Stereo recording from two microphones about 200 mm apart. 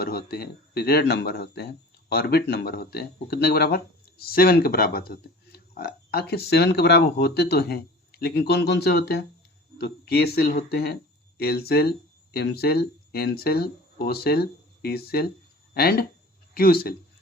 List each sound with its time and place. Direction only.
0.0 s speech: 50° left (ahead or behind)